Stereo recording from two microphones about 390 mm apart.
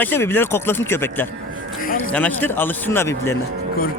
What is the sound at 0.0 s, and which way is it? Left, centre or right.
Speech, centre.